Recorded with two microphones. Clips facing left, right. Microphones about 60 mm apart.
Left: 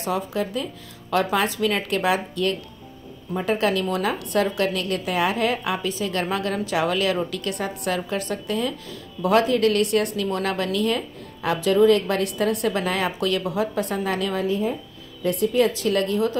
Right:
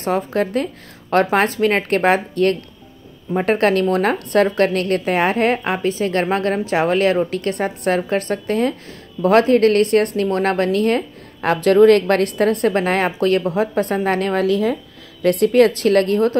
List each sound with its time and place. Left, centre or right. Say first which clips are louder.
0.0 s a woman's voice: right 6 dB; right
14.4 s speech: right 6 dB; right
15.2 s a woman's voice: right 7 dB; right